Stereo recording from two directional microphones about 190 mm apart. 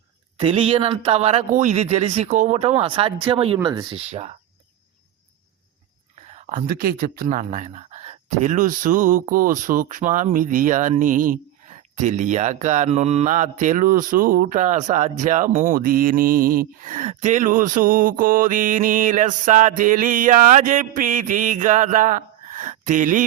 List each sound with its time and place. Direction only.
0.3 s speech: 30° right (ahead or behind)
4.1 s speech: 35° right (ahead or behind)
6.3 s speech: 45° right (ahead or behind)